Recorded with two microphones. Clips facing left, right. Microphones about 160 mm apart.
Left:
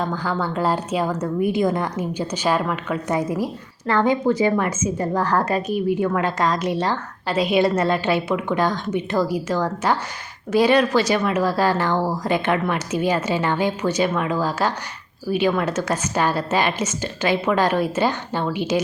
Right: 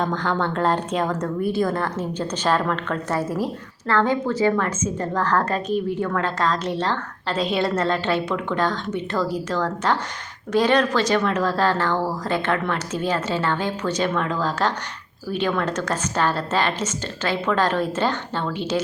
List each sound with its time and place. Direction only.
0.0 s a woman's voice: 5° left (ahead or behind)